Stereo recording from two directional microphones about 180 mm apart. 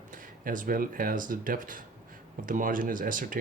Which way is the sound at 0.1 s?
50° right (ahead or behind).